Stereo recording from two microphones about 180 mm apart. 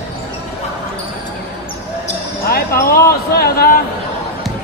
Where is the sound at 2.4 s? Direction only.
55° left (ahead or behind).